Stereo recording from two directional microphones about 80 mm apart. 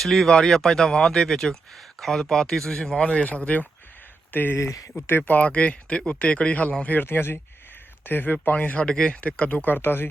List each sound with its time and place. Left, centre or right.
0.0 s speech: centre; by 4.5 s left
4.5 s speech: left
5.0 s speech: left